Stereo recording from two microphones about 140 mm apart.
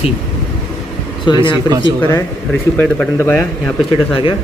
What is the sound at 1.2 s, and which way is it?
Speech, 30° left (ahead or behind).